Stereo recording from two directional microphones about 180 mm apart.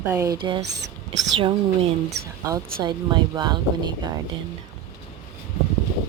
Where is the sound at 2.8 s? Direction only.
25° right (ahead or behind).